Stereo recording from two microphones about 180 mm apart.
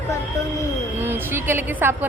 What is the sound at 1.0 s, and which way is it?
Speech, 10° right (ahead or behind).